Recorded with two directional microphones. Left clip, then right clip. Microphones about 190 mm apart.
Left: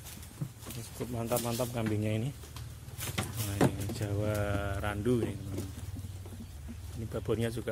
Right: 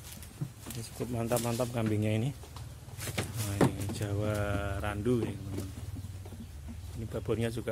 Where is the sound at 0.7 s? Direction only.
20° right (ahead or behind).